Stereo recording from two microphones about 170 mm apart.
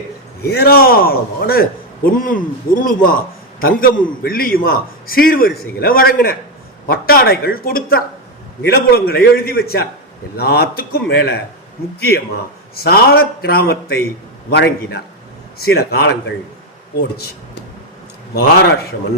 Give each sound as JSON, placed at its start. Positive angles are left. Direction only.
{"t": 0.4, "sound": "a man's voice", "side_deg": 65}
{"t": 14.5, "sound": "a man's voice", "side_deg": 80}